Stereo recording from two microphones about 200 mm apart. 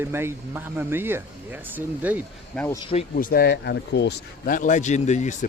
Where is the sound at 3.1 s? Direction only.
45° left (ahead or behind).